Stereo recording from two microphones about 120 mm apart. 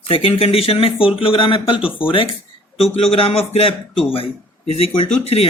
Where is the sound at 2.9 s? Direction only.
55° left (ahead or behind).